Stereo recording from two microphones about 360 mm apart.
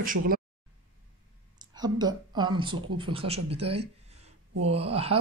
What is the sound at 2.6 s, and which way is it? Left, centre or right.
Speech, centre.